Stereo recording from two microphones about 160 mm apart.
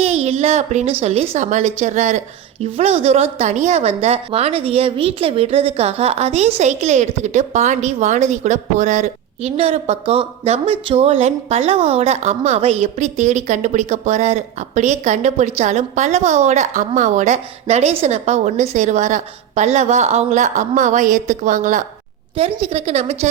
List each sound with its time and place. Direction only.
0.0 s a sound: 40° right (ahead or behind)
1.0 s a woman's voice: 40° right (ahead or behind)
22.6 s a woman's voice: 40° right (ahead or behind)